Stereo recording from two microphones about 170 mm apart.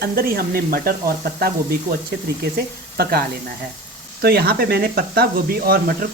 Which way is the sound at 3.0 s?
65° right (ahead or behind).